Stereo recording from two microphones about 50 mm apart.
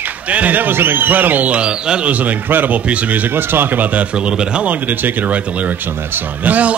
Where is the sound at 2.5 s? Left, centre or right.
Right.